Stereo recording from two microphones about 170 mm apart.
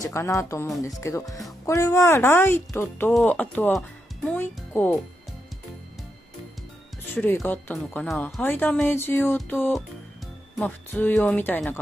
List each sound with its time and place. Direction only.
0.0 s speech: 20° left (ahead or behind)
7.2 s speech: 10° left (ahead or behind)